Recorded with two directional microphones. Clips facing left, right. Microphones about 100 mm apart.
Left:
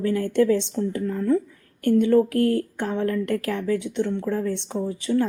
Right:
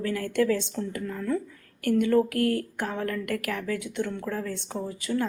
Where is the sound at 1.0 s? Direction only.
35° left (ahead or behind).